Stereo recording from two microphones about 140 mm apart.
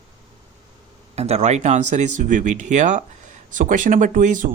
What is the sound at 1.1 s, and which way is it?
Speech, 50° right (ahead or behind).